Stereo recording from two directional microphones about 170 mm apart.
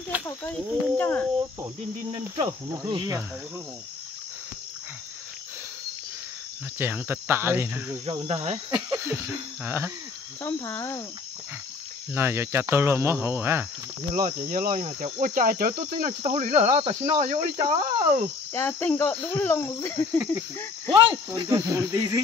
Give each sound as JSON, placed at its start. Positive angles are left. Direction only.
{"t": 0.1, "sound": "a sound", "side_deg": -10}
{"t": 0.8, "sound": "cricket", "side_deg": 10}
{"t": 2.0, "sound": "speech", "side_deg": -30}
{"t": 6.8, "sound": "speech", "side_deg": -15}
{"t": 8.0, "sound": "cricket", "side_deg": -35}
{"t": 8.6, "sound": "speech", "side_deg": -15}
{"t": 10.4, "sound": "cricket", "side_deg": 15}
{"t": 12.1, "sound": "speech", "side_deg": -15}
{"t": 14.5, "sound": "cricket", "side_deg": -55}
{"t": 16.2, "sound": "cricket", "side_deg": -40}
{"t": 16.8, "sound": "cricket", "side_deg": -35}
{"t": 18.5, "sound": "cricket", "side_deg": 10}
{"t": 20.9, "sound": "speech", "side_deg": -20}